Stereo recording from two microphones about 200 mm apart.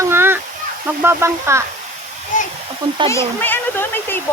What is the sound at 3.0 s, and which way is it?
Speech, 10° left (ahead or behind).